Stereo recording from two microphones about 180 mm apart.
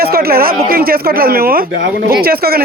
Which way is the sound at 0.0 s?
55° right (ahead or behind).